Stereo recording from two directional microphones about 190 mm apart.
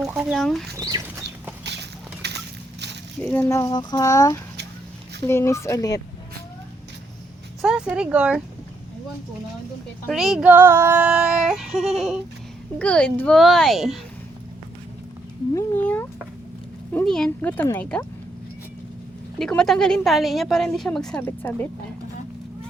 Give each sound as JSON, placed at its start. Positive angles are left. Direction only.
{"t": 0.0, "sound": "female singing", "side_deg": -5}
{"t": 0.8, "sound": "speech", "side_deg": -20}
{"t": 1.6, "sound": "a sound", "side_deg": -65}
{"t": 3.2, "sound": "speech", "side_deg": 10}
{"t": 7.6, "sound": "speech", "side_deg": -5}
{"t": 10.1, "sound": "female singing", "side_deg": 0}
{"t": 15.5, "sound": "a sound", "side_deg": 10}
{"t": 16.9, "sound": "speech", "side_deg": 5}
{"t": 19.4, "sound": "female singing", "side_deg": 5}
{"t": 21.2, "sound": "a woman's voice", "side_deg": 10}